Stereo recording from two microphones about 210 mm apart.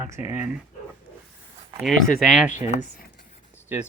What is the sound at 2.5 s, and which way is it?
Speech, 35° left (ahead or behind).